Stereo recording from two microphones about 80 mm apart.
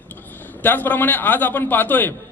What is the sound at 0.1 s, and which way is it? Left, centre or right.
A man's voice, left.